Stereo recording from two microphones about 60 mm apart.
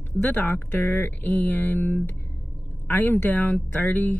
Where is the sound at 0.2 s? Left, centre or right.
Left.